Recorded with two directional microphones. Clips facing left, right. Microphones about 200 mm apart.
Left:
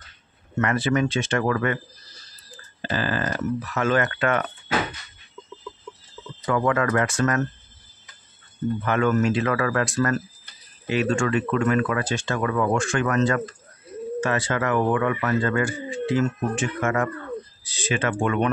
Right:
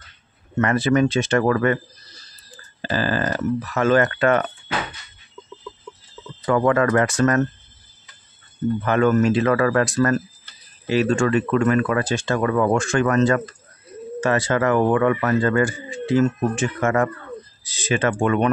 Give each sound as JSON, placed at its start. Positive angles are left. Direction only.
{"t": 0.6, "sound": "speech", "side_deg": -40}
{"t": 2.9, "sound": "speech", "side_deg": -35}
{"t": 6.4, "sound": "speech", "side_deg": -40}
{"t": 8.8, "sound": "speech", "side_deg": -40}